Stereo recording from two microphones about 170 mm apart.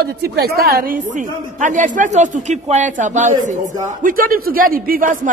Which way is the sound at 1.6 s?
50° right (ahead or behind).